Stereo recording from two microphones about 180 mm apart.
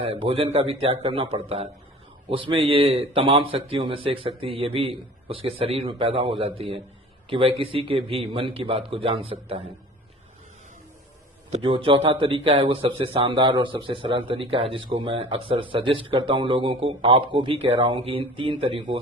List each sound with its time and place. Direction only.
0.0 s speech: 30° right (ahead or behind)
11.5 s a man's voice: 30° right (ahead or behind)